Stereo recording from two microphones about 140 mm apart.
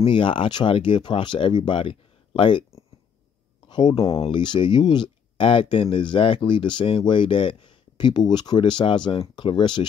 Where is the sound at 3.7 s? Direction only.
35° left (ahead or behind).